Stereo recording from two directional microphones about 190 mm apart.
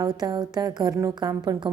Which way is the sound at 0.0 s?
20° right (ahead or behind).